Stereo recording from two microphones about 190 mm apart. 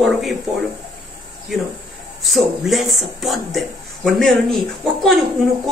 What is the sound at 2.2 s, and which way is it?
Speech, centre (ahead or behind).